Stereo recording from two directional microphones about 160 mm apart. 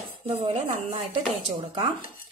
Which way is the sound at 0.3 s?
40° right (ahead or behind).